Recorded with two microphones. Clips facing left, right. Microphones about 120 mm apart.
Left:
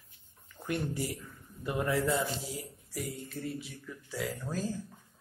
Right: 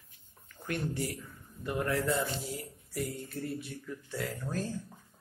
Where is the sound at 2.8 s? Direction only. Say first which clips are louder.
Right 4 dB; centre (ahead or behind).